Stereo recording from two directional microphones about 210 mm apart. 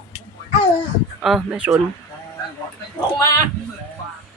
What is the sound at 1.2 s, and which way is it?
Speech, centre (ahead or behind).